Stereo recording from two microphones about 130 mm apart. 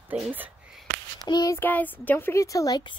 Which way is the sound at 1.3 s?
30° left (ahead or behind).